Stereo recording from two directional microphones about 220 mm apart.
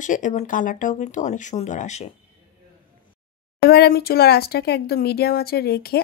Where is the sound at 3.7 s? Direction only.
45° left (ahead or behind).